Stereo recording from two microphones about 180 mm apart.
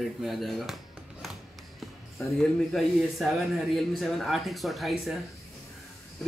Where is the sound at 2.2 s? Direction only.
Centre (ahead or behind).